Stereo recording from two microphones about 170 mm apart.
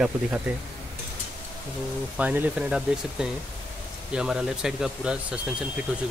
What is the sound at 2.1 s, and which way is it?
Speech, 10° right (ahead or behind).